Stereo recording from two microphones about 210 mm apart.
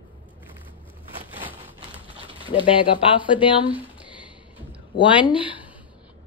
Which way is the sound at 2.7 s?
25° left (ahead or behind).